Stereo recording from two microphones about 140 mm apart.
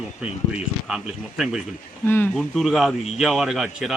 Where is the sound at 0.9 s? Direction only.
5° right (ahead or behind).